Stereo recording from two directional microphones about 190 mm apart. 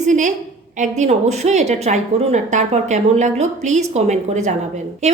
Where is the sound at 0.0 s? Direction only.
40° right (ahead or behind).